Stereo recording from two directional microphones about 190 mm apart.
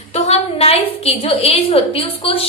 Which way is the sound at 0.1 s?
35° left (ahead or behind).